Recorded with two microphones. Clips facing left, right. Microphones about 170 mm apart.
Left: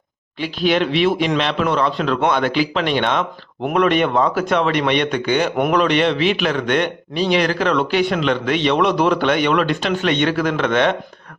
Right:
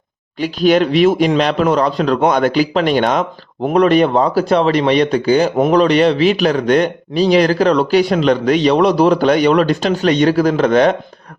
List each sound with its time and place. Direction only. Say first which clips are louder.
0.3 s speech: right 5 dB; 45° right (ahead or behind)